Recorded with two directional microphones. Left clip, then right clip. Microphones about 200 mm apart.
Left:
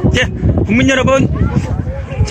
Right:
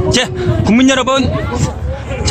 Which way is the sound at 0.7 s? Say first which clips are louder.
Even; 20° right (ahead or behind).